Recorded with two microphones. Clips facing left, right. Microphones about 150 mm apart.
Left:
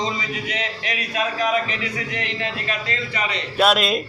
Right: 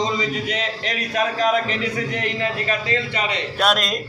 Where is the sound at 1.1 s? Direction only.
50° right (ahead or behind).